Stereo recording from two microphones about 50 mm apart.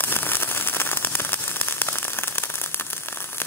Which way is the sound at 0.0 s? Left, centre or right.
Left.